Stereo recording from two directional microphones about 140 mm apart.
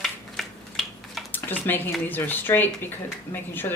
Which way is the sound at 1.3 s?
15° left (ahead or behind).